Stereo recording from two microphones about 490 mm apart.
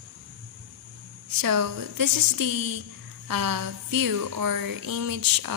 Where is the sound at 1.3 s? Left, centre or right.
Right.